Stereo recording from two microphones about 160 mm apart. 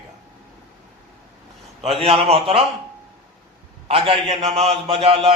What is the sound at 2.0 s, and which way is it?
Speech, 35° right (ahead or behind).